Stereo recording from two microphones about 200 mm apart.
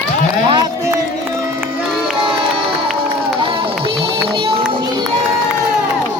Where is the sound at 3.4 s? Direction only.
25° right (ahead or behind).